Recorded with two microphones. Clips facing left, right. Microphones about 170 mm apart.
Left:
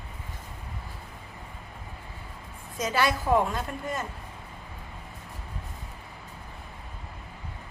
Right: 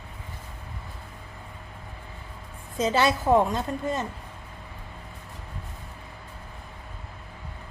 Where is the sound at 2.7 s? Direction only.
25° right (ahead or behind).